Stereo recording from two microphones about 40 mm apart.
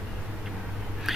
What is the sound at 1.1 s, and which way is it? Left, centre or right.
Biting, centre.